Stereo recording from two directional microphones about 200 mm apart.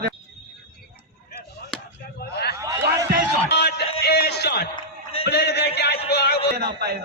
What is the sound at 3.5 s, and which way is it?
Music, 55° left (ahead or behind).